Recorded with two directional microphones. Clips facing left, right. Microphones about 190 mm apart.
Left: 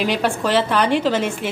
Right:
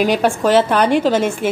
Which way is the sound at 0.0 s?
45° right (ahead or behind).